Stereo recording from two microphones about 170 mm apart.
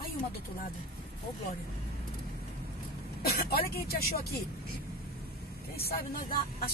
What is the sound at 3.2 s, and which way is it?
Speech, 65° left (ahead or behind).